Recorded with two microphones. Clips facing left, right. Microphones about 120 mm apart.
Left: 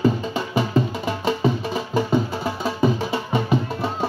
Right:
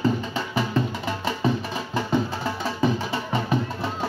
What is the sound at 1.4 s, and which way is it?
Music, 15° left (ahead or behind).